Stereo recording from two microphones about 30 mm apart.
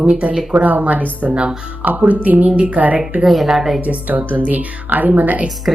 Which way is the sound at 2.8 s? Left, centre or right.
Right.